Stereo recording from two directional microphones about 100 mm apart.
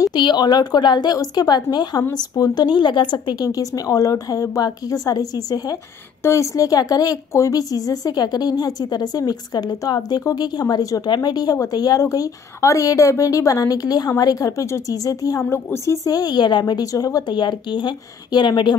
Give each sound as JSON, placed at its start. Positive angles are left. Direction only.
{"t": 0.1, "sound": "a woman's voice", "side_deg": 50}